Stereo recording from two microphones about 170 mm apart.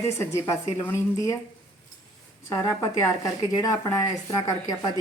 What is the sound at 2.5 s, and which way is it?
Speech, 20° left (ahead or behind).